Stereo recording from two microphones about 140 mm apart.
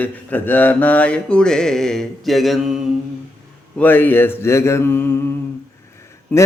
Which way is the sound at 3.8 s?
15° left (ahead or behind).